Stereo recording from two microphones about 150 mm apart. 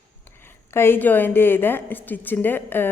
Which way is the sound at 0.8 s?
15° left (ahead or behind).